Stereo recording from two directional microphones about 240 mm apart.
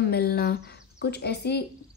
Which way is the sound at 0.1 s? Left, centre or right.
Left.